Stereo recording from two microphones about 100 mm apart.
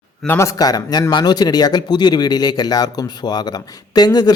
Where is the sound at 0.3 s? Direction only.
30° left (ahead or behind).